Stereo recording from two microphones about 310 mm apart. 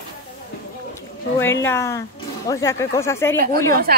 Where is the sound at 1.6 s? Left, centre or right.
Centre.